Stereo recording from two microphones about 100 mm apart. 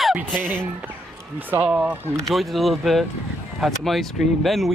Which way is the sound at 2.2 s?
Centre (ahead or behind).